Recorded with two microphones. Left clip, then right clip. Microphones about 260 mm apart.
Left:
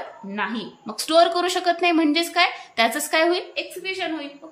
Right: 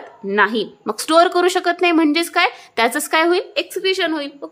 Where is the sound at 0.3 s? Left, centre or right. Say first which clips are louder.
Right 12 dB; centre.